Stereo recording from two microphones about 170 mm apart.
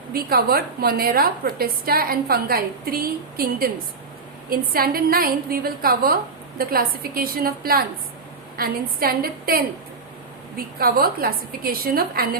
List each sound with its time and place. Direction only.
0.1 s a woman's voice: 60° right (ahead or behind)
10.8 s a woman's voice: 60° right (ahead or behind)